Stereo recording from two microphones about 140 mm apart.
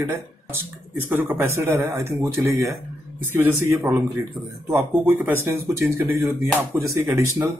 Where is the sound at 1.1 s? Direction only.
15° right (ahead or behind).